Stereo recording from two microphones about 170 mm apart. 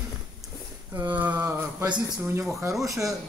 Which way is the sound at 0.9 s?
10° right (ahead or behind).